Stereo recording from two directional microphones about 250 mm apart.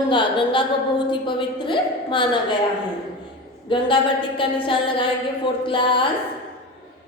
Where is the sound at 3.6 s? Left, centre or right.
Centre.